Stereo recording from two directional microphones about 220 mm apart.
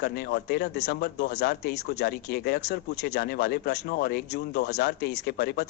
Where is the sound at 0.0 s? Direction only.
45° left (ahead or behind).